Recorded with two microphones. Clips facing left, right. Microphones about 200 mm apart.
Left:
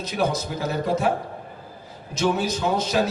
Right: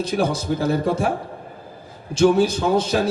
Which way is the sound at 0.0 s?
30° right (ahead or behind).